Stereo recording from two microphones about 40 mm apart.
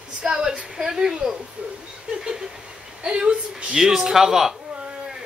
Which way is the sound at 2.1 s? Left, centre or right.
Centre.